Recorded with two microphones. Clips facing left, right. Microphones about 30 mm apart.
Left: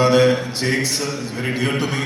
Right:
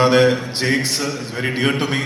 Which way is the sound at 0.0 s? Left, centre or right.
Right.